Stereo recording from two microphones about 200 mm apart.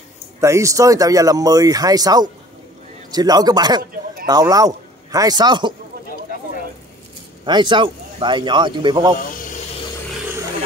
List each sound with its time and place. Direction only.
0.4 s a man's voice: 15° right (ahead or behind)
7.4 s speech: 20° right (ahead or behind)